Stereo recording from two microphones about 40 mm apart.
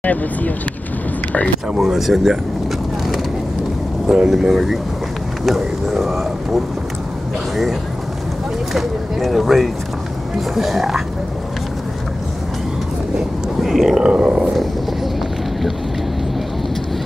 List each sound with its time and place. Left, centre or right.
0.0 s speech: left
1.8 s speech: centre
4.1 s speech: centre
8.7 s speech: centre
13.6 s speech: centre
14.0 s speech: right